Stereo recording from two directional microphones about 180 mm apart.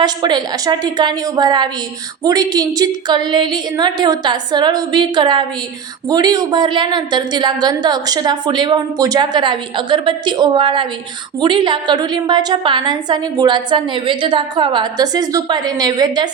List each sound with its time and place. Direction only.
0.0 s a woman's voice: 25° right (ahead or behind)